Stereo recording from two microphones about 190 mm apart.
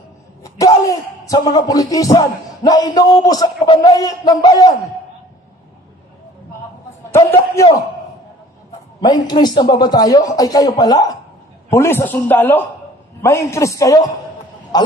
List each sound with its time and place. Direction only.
0.4 s speech: 15° left (ahead or behind)
7.1 s a man's voice: 15° left (ahead or behind)
9.0 s a man's voice: 20° left (ahead or behind)